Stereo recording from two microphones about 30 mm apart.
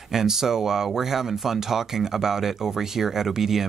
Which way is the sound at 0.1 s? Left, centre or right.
Centre.